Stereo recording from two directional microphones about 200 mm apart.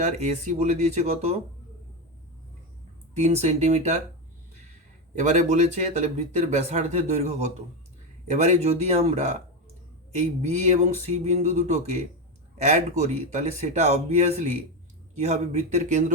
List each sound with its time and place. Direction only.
0.0 s speech: 35° right (ahead or behind)
3.2 s speech: 35° right (ahead or behind)
5.1 s speech: 35° right (ahead or behind)
13.0 s speech: 35° right (ahead or behind)